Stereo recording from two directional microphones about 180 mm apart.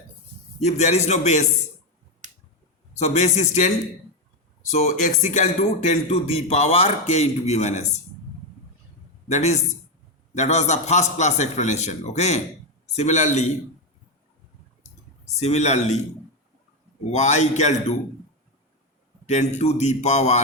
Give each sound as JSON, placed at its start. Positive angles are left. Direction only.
{"t": 0.6, "sound": "speech", "side_deg": 40}
{"t": 2.9, "sound": "speech", "side_deg": 40}
{"t": 4.7, "sound": "speech", "side_deg": 40}
{"t": 9.3, "sound": "speech", "side_deg": 40}
{"t": 15.4, "sound": "speech", "side_deg": 40}
{"t": 17.1, "sound": "speech", "side_deg": 40}
{"t": 19.2, "sound": "speech", "side_deg": 40}